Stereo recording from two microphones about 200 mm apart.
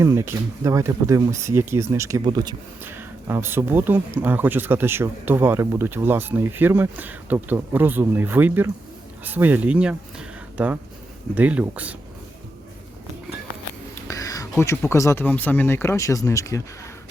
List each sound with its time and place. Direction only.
0.0 s speech: 15° right (ahead or behind)
14.1 s a sound: 15° left (ahead or behind)
14.6 s speech: 10° left (ahead or behind)